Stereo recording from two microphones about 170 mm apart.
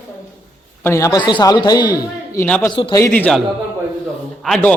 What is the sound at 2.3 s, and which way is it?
Speech, 10° left (ahead or behind).